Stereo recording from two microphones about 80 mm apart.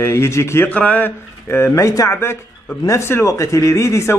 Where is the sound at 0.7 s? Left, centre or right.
Centre.